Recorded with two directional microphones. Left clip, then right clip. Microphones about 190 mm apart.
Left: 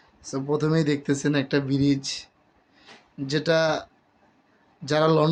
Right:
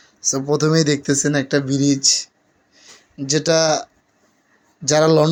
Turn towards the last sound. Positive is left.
turn(degrees=-30)  # may be behind; listen again after turning